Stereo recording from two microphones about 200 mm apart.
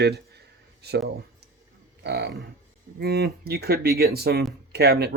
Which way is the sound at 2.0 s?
55° right (ahead or behind).